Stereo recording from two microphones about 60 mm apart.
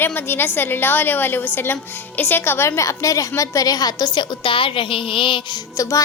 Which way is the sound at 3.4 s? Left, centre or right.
Left.